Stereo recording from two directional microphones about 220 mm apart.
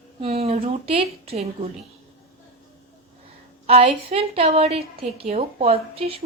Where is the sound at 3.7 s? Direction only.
25° right (ahead or behind).